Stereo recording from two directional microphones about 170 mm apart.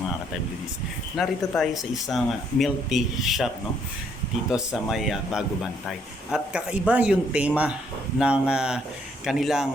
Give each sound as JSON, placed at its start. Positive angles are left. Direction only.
{"t": 1.1, "sound": "speech", "side_deg": 0}
{"t": 4.5, "sound": "speech", "side_deg": 0}